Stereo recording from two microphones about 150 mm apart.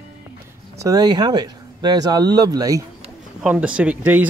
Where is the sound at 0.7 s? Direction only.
25° right (ahead or behind).